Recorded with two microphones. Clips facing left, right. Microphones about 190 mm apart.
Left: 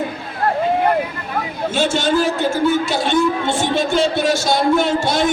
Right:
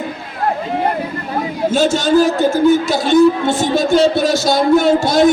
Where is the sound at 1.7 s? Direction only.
40° right (ahead or behind).